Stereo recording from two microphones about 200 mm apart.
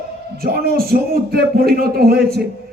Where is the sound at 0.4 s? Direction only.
50° right (ahead or behind).